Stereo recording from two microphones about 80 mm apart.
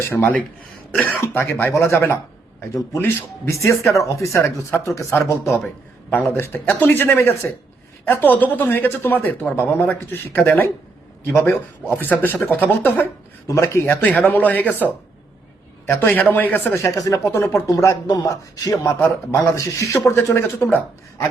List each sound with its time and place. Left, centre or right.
0.1 s speech: left
3.6 s speech: left
6.1 s speech: left
13.5 s speech: left
13.9 s speech: centre
15.9 s speech: left
16.7 s a man's voice: left
18.9 s speech: left